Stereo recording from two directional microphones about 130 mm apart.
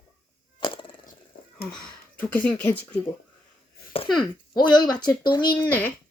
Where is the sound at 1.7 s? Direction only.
10° left (ahead or behind).